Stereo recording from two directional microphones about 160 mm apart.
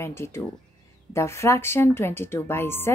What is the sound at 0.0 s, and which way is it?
Speech, 15° left (ahead or behind).